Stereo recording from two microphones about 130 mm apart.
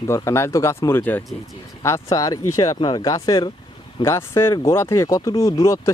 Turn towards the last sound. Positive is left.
turn(degrees=25)  # may be behind; listen again after turning